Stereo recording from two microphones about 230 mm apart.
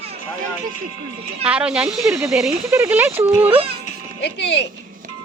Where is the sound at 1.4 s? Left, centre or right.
Centre.